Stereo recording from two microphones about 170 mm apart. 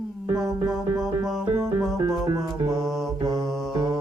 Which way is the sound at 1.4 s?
20° right (ahead or behind).